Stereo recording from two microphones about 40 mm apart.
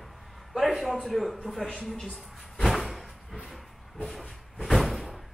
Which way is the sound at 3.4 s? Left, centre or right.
Centre.